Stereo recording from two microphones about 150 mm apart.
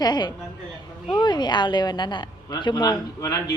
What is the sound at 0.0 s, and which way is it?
Speech, 30° left (ahead or behind).